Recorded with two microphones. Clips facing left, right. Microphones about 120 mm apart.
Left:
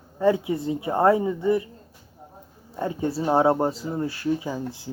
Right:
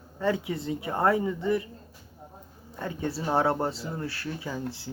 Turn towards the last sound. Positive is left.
turn(degrees=20)  # may be behind; listen again after turning